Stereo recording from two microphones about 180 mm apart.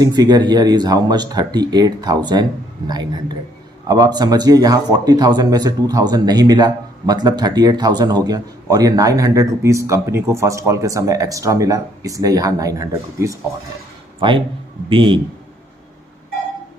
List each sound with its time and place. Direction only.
0.0 s a man's voice: 20° right (ahead or behind)